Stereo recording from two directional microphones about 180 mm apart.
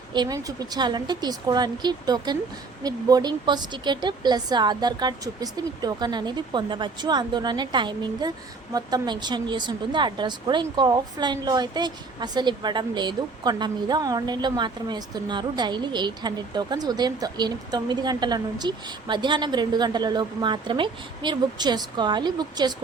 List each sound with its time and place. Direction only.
0.1 s speech: 20° right (ahead or behind)